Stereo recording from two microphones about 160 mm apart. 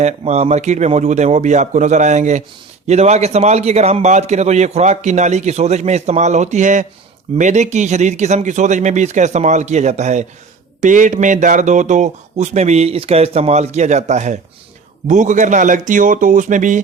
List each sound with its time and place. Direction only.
0.0 s a man's voice: 45° right (ahead or behind)